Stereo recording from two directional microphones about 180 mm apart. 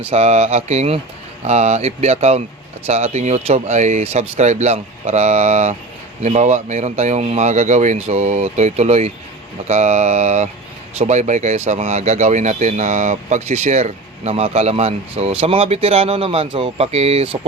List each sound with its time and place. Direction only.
0.1 s speech: 35° right (ahead or behind)